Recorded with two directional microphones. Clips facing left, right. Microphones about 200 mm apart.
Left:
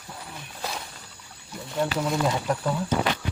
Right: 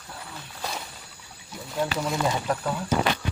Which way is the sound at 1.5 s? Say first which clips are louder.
Left 1 dB; centre (ahead or behind).